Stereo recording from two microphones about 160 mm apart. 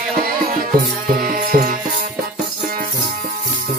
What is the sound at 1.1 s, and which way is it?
Music, 60° right (ahead or behind).